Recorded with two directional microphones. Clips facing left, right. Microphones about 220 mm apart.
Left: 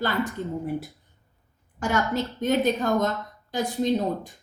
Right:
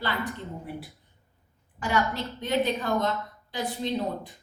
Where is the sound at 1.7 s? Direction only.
45° left (ahead or behind).